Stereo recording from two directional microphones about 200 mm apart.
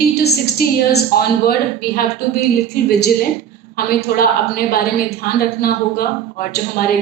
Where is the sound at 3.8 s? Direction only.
50° left (ahead or behind).